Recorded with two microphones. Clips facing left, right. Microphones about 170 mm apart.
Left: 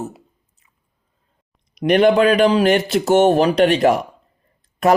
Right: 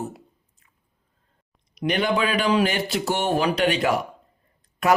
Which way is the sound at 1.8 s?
50° left (ahead or behind).